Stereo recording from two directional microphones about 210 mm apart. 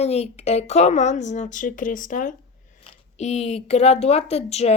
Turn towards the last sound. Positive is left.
turn(degrees=30)  # may be behind; listen again after turning